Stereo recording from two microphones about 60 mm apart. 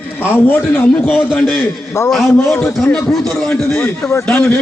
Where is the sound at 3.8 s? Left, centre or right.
Left.